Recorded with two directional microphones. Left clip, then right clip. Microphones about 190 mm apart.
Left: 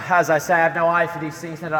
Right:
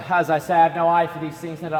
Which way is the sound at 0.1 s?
25° left (ahead or behind).